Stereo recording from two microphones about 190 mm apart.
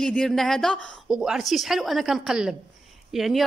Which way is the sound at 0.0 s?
5° left (ahead or behind).